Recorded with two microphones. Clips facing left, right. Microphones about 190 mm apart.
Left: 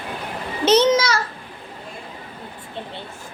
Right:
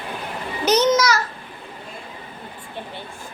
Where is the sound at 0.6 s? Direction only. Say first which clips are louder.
Left 2 dB; 30° left (ahead or behind).